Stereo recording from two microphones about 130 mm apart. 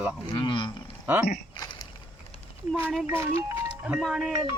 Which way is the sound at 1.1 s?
15° right (ahead or behind).